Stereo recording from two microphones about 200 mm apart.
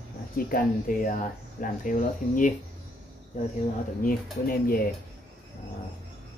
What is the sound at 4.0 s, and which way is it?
Speech, 45° left (ahead or behind).